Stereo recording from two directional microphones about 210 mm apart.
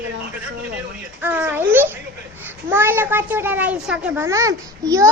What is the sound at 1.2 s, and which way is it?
Speech, 10° right (ahead or behind).